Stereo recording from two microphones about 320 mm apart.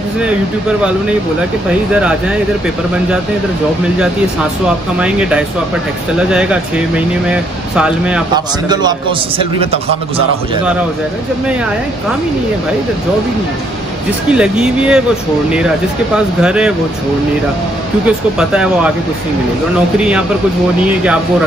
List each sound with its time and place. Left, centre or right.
2.0 s speech: centre
4.9 s a man's voice: centre
14.3 s speech: centre
16.3 s speech: centre
18.0 s speech: centre
20.0 s speech: centre